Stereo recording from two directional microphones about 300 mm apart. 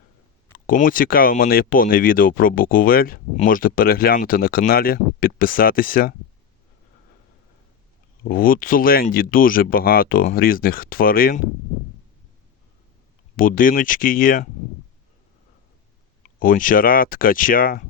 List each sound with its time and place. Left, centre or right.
0.5 s speech: left
8.2 s speech: left
13.3 s speech: left
16.2 s speech: left